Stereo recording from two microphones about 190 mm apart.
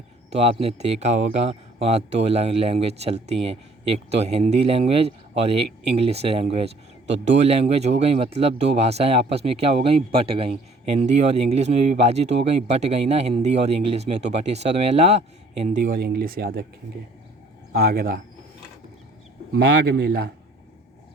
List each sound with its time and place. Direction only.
0.3 s a man's voice: 35° right (ahead or behind); by 16.6 s 50° right (ahead or behind)
17.7 s speech: 50° right (ahead or behind)
19.5 s a man's voice: 60° right (ahead or behind)